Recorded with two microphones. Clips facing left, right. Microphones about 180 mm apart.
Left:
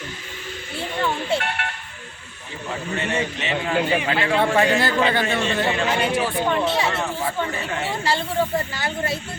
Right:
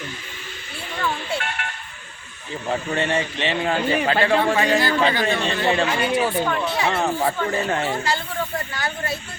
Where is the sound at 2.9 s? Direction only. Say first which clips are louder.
Right 2 dB; 30° right (ahead or behind).